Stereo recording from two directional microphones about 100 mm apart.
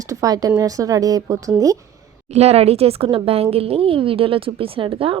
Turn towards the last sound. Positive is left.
turn(degrees=-65)  # may be behind; listen again after turning